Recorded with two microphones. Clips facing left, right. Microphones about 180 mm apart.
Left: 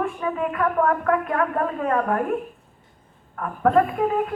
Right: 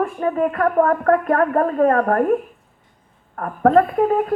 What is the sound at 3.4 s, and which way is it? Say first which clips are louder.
Speech: right 4 dB; 45° right (ahead or behind).